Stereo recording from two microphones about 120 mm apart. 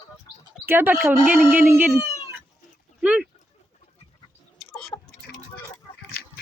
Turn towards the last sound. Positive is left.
turn(degrees=0)  # may be behind; listen again after turning